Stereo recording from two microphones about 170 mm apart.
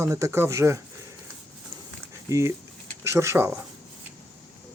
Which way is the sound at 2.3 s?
20° right (ahead or behind).